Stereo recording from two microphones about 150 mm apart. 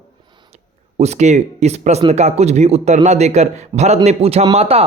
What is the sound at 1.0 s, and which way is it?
A man's voice, 50° right (ahead or behind).